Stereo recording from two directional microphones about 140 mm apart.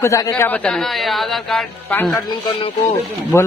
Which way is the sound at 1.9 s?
10° left (ahead or behind).